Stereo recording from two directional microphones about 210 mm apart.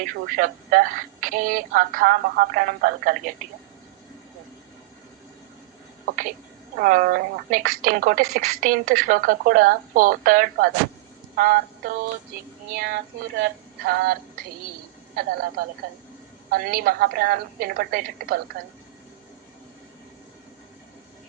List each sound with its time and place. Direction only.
0.0 s a woman's voice: 40° right (ahead or behind)
6.1 s a woman's voice: 40° right (ahead or behind)
11.3 s a sound: 45° right (ahead or behind)
12.7 s speech: 45° right (ahead or behind)